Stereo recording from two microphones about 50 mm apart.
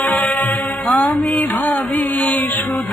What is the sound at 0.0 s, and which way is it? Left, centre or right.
Music, left.